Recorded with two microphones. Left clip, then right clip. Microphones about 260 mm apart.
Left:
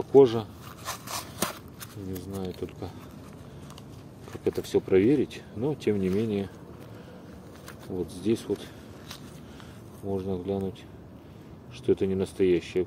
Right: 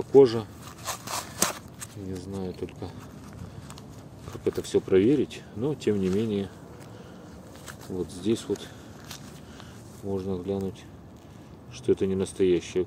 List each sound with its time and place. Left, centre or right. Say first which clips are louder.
0.1 s speech: right 1 dB; centre
0.8 s a sound: right 2 dB; centre
2.3 s speech: even; centre
4.5 s speech: right 1 dB; centre
8.1 s speech: even; centre
10.0 s speech: even; centre
11.8 s speech: right 1 dB; centre